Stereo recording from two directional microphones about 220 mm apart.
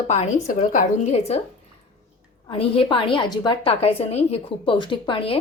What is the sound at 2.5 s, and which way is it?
A woman's voice, 25° left (ahead or behind).